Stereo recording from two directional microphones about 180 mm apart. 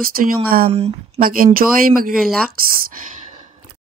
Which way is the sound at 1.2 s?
50° right (ahead or behind).